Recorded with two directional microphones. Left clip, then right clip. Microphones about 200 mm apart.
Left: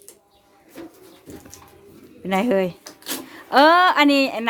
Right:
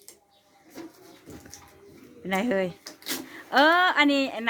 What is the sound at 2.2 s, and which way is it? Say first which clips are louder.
A woman's voice: left 6 dB; 20° left (ahead or behind).